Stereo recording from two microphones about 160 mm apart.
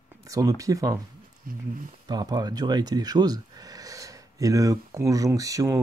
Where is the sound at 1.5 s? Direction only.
65° right (ahead or behind).